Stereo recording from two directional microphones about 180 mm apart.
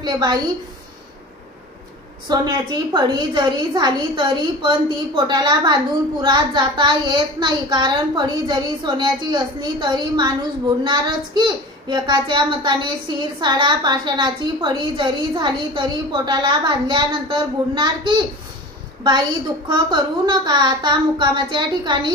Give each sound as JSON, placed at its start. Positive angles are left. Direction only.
{"t": 0.0, "sound": "a woman's voice", "side_deg": -25}
{"t": 2.2, "sound": "a woman's voice", "side_deg": -25}
{"t": 19.7, "sound": "a woman's voice", "side_deg": -25}